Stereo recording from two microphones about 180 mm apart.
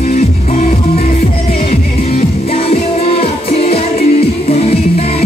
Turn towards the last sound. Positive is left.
turn(degrees=35)  # may be behind; listen again after turning